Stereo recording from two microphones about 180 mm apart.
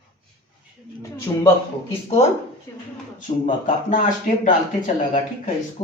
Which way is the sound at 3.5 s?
50° left (ahead or behind).